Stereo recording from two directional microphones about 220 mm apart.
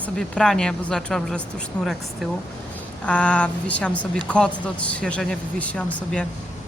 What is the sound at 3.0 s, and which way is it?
Speech, 5° left (ahead or behind).